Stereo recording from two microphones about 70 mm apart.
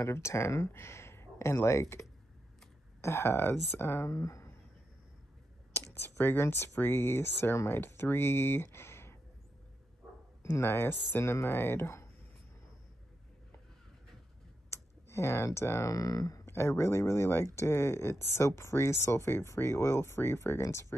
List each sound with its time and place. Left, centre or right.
0.0 s speech: left
5.9 s speech: left
10.6 s speech: left
14.7 s speech: left
16.4 s speech: left